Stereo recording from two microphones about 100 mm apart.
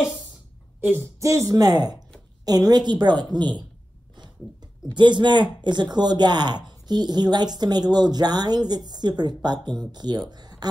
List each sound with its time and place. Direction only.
0.7 s a woman's voice: 20° right (ahead or behind); by 3.6 s 45° right (ahead or behind)
4.9 s speech: 50° right (ahead or behind)
10.3 s a sound: 45° right (ahead or behind)